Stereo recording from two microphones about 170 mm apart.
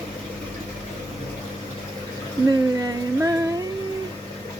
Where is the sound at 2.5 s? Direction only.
20° right (ahead or behind).